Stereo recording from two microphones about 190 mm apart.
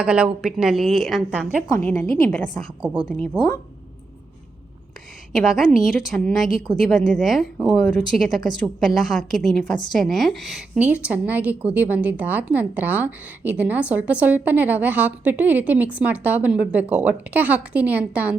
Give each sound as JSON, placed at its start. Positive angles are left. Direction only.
{"t": 0.0, "sound": "speech", "side_deg": -5}
{"t": 1.8, "sound": "a woman's voice", "side_deg": 5}
{"t": 3.3, "sound": "speech", "side_deg": 20}
{"t": 5.4, "sound": "a woman's voice", "side_deg": 0}